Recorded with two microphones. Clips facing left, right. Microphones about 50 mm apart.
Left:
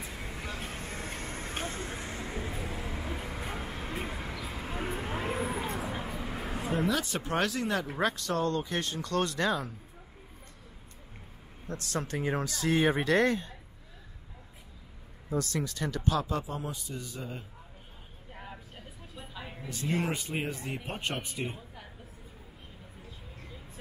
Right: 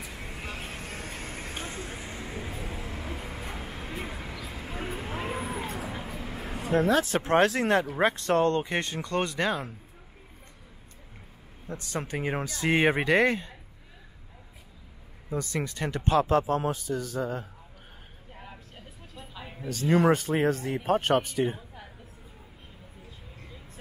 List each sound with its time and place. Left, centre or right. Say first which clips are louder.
0.0 s vehicle: right 1 dB; centre
5.8 s a sound: even; centre
6.7 s speech: right 7 dB; right
8.0 s speech: right 3 dB; right
9.0 s speech: even; right
11.7 s speech: right 1 dB; right
15.2 s speech: right 1 dB; centre
15.6 s speech: right 2 dB; right
16.3 s a man's voice: right 10 dB; right
18.3 s a sound: left 1 dB; centre
20.1 s speech: right 10 dB; right